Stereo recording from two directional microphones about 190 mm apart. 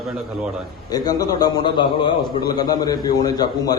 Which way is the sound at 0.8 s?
20° left (ahead or behind).